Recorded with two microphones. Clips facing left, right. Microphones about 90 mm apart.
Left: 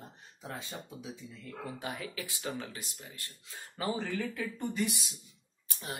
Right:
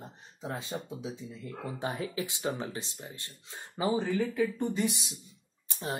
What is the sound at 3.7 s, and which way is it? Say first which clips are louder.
Speech: right 5 dB; 15° right (ahead or behind).